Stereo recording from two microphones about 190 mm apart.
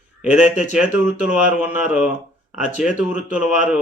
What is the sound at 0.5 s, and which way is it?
Speech, 40° left (ahead or behind).